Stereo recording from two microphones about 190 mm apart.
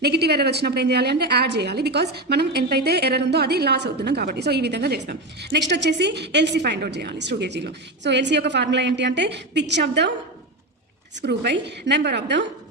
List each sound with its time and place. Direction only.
0.0 s a woman's voice: 60° right (ahead or behind)
11.2 s a woman's voice: 65° right (ahead or behind)